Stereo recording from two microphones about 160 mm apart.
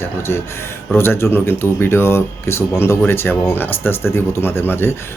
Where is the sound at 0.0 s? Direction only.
15° left (ahead or behind).